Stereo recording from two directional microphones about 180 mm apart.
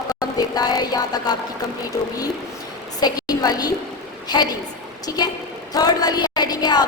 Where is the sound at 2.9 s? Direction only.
20° left (ahead or behind).